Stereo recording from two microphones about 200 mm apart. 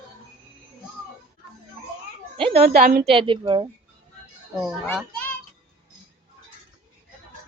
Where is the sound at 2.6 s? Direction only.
45° right (ahead or behind).